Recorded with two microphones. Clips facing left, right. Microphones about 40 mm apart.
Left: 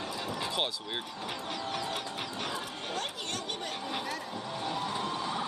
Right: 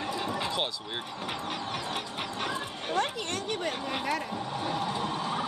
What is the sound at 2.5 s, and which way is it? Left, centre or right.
Speech, right.